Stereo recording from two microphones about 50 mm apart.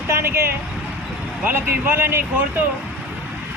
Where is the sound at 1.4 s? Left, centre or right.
Right.